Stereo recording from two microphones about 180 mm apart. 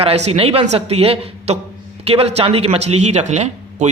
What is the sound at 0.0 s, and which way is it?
Speech, 35° right (ahead or behind).